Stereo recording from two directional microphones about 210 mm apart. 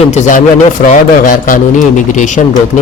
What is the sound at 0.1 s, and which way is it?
A man's voice, 35° left (ahead or behind).